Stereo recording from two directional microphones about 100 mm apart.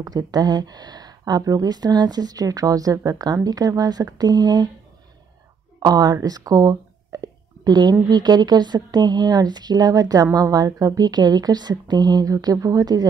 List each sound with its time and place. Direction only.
0.0 s speech: 40° right (ahead or behind)
5.8 s speech: 40° right (ahead or behind)
6.2 s a sound: 40° right (ahead or behind)
8.1 s speech: 45° right (ahead or behind)